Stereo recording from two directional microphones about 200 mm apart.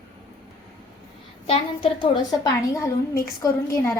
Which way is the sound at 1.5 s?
25° left (ahead or behind).